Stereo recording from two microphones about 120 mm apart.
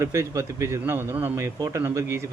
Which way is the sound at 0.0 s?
25° right (ahead or behind).